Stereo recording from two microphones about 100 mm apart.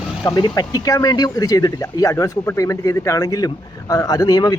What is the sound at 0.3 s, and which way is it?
Speech, 40° left (ahead or behind).